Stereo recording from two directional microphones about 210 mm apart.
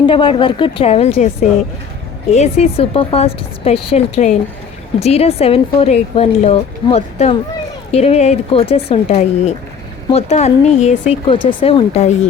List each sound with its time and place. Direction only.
0.1 s speech: 25° left (ahead or behind)